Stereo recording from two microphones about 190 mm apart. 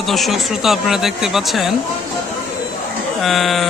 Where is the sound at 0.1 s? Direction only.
Centre (ahead or behind).